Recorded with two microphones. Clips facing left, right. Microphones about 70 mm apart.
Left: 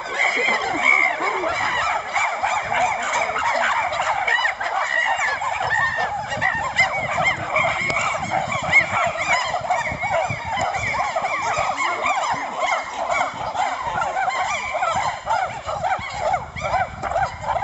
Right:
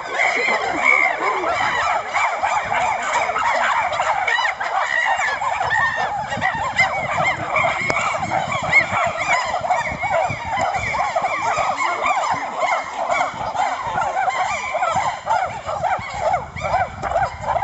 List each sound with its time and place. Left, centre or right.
0.2 s snicker: centre
2.1 s fowl: centre
6.6 s fowl: centre